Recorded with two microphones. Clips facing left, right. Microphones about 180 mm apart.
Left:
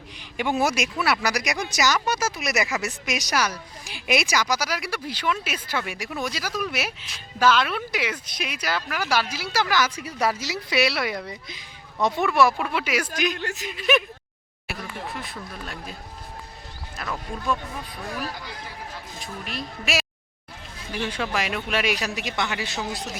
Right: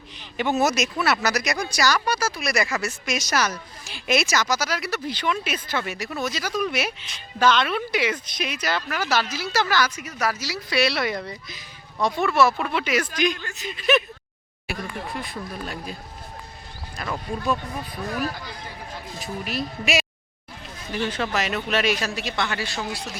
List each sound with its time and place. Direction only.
0.2 s speech: 10° left (ahead or behind)
9.9 s speech: 30° left (ahead or behind); by 13.1 s 10° left (ahead or behind)
13.3 s speech: 65° left (ahead or behind)
13.7 s speech: 10° left (ahead or behind)
15.1 s speech: centre (ahead or behind)
17.0 s speech: 5° right (ahead or behind)
19.2 s speech: 5° right (ahead or behind); by 23.1 s 20° left (ahead or behind)